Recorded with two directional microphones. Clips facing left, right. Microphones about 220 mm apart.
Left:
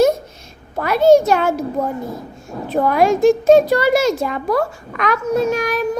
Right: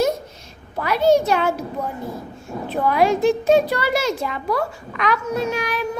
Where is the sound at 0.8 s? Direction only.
45° left (ahead or behind).